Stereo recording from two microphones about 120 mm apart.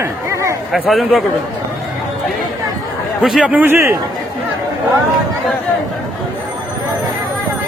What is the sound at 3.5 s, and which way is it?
Speech, 15° right (ahead or behind).